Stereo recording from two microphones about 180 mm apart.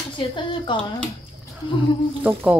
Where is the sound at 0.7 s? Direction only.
25° left (ahead or behind).